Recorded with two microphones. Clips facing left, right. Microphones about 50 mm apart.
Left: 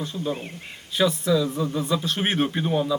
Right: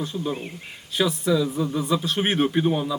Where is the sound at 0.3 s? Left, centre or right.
Left.